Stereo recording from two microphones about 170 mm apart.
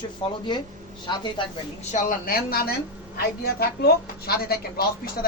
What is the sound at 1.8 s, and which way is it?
A woman's voice, 45° left (ahead or behind).